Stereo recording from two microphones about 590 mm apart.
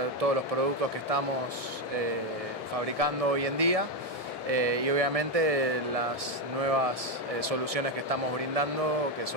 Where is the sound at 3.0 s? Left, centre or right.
Right.